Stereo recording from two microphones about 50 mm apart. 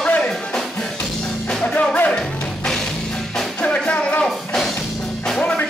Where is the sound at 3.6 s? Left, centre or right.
Left.